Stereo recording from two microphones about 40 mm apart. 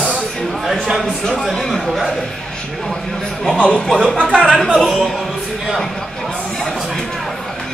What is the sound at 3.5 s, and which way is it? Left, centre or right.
Speech, left.